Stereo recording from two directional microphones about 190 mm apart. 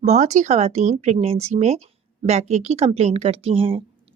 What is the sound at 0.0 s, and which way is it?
A woman's voice, 35° right (ahead or behind).